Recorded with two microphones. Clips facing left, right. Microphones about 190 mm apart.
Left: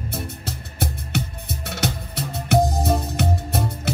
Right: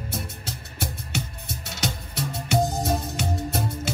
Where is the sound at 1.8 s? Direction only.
60° left (ahead or behind).